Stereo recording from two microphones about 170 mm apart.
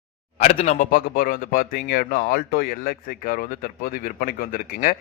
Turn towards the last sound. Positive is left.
turn(degrees=55)  # may be behind; listen again after turning